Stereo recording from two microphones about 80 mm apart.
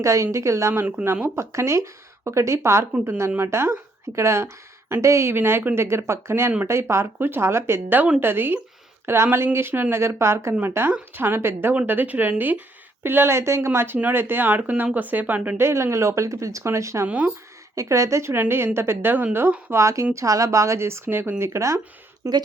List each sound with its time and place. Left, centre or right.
0.0 s speech: right
15.5 s speech: right
17.1 s speech: centre
17.7 s speech: right
19.7 s speech: right